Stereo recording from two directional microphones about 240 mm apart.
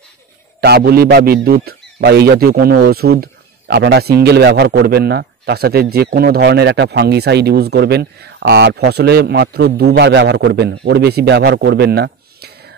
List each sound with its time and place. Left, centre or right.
0.6 s a man's voice: right